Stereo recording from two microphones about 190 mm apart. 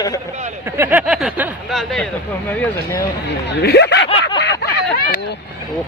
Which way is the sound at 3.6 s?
60° left (ahead or behind).